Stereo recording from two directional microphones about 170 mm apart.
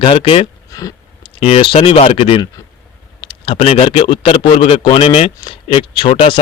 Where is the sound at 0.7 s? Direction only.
20° left (ahead or behind).